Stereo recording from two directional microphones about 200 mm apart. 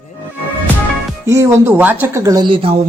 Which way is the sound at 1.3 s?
15° right (ahead or behind).